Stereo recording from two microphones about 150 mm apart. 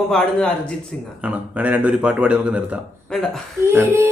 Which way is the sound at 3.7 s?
15° right (ahead or behind).